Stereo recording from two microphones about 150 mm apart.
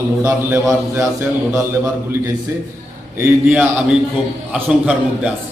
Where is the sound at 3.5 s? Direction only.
10° right (ahead or behind).